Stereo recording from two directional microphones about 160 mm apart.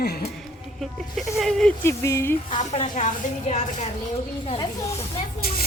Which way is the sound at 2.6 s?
50° left (ahead or behind).